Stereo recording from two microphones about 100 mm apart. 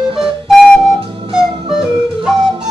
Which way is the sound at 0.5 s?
5° right (ahead or behind).